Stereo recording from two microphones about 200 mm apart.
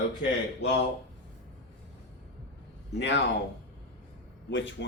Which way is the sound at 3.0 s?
60° left (ahead or behind).